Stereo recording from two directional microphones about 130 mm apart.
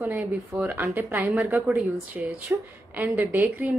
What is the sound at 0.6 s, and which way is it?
A woman's voice, 20° right (ahead or behind).